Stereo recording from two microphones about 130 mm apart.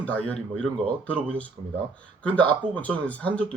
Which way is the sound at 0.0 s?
10° left (ahead or behind).